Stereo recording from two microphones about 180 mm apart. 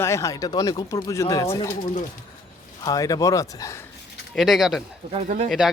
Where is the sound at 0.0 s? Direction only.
15° left (ahead or behind).